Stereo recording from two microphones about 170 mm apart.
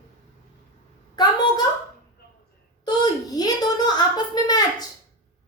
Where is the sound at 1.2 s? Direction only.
25° left (ahead or behind).